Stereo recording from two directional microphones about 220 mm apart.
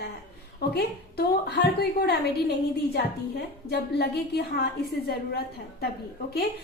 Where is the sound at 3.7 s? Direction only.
45° left (ahead or behind).